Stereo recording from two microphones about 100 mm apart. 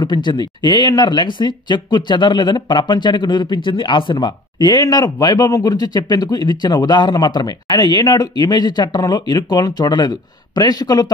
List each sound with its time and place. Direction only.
0.0 s speech: 45° left (ahead or behind)